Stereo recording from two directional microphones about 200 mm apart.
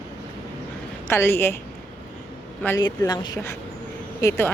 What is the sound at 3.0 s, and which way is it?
Speech, 20° left (ahead or behind).